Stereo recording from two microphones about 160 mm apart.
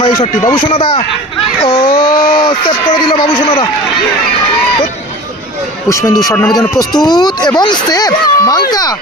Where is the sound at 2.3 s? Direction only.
30° left (ahead or behind).